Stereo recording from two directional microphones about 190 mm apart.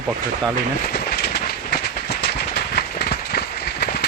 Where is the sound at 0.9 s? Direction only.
55° left (ahead or behind).